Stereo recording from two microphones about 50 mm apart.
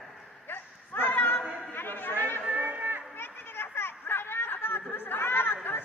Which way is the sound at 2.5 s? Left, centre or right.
Right.